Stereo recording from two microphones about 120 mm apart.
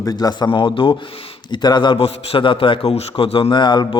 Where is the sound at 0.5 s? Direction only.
45° left (ahead or behind).